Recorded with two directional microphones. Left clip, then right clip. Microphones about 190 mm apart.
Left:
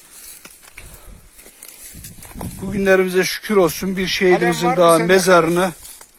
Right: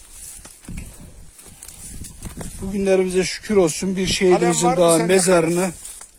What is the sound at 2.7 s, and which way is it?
Speech, 10° right (ahead or behind).